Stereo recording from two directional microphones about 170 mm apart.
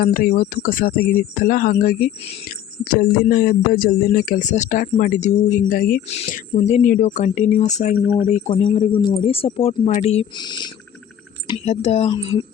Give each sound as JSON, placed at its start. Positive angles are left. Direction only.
{"t": 0.0, "sound": "speech", "side_deg": 60}
{"t": 6.1, "sound": "speech", "side_deg": 40}
{"t": 10.3, "sound": "speech", "side_deg": 25}
{"t": 11.6, "sound": "speech", "side_deg": 40}
{"t": 12.1, "sound": "speech", "side_deg": 25}